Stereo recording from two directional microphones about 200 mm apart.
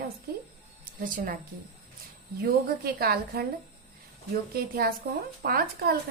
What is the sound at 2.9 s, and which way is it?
Speech, 50° right (ahead or behind).